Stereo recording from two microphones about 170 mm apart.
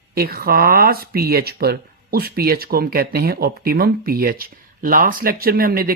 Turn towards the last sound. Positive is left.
turn(degrees=-60)  # may be behind; listen again after turning